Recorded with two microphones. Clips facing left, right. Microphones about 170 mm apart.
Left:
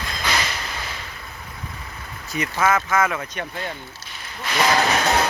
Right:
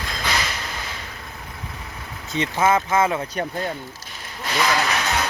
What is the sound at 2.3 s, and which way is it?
Speech, 25° right (ahead or behind).